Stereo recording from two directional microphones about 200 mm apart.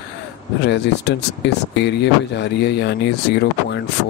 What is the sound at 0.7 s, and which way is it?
Speech, 60° left (ahead or behind).